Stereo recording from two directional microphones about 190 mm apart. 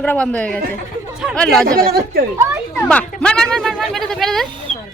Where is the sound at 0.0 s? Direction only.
5° left (ahead or behind).